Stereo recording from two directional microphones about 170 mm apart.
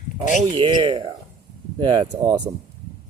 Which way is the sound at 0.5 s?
25° right (ahead or behind).